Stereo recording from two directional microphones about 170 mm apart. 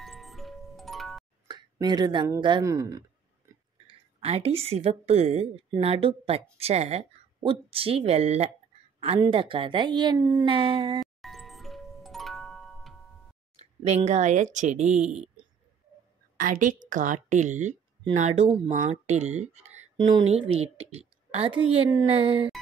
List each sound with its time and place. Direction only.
0.0 s music: centre (ahead or behind)
1.5 s a sound: 25° right (ahead or behind)
2.4 s speech: 20° right (ahead or behind)
3.8 s a woman's voice: 35° right (ahead or behind)
11.0 s music: centre (ahead or behind)
13.6 s speech: 40° right (ahead or behind)
16.3 s a woman's voice: 50° right (ahead or behind)
20.0 s a woman's voice: 25° right (ahead or behind)